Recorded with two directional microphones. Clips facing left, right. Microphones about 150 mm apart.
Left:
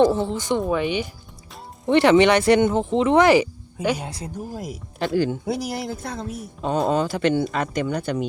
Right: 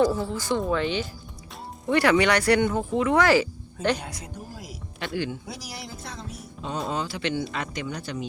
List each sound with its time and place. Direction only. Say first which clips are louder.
0.0 s speech: left 5 dB; 25° left (ahead or behind)
4.0 s speech: left 5 dB; 30° left (ahead or behind)
4.5 s speech: left 8 dB; 50° left (ahead or behind)
5.5 s speech: left 12 dB; 55° left (ahead or behind)